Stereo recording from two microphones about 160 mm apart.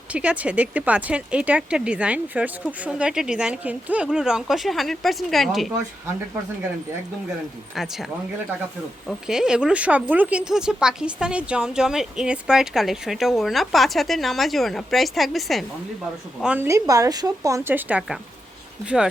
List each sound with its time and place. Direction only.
0.1 s speech: 10° right (ahead or behind)
7.7 s speech: centre (ahead or behind)
9.0 s speech: 5° right (ahead or behind)
16.6 s speech: 20° right (ahead or behind)